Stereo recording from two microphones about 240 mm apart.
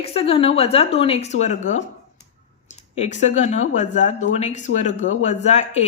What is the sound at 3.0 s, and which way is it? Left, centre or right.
A woman's voice, left.